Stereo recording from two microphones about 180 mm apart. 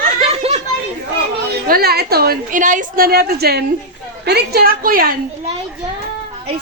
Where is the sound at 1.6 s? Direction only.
55° right (ahead or behind).